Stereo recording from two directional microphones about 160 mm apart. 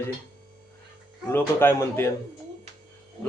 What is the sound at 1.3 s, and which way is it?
Speech, 15° left (ahead or behind).